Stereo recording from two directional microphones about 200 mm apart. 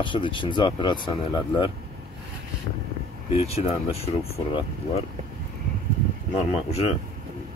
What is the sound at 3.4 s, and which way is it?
Speech, 30° left (ahead or behind).